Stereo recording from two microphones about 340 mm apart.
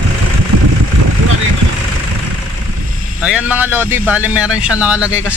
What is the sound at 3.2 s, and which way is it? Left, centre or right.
Speech, centre.